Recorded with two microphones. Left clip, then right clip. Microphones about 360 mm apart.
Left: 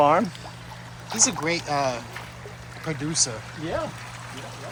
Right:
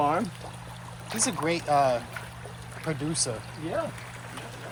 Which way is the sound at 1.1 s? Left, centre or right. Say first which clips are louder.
Left 4 dB; centre.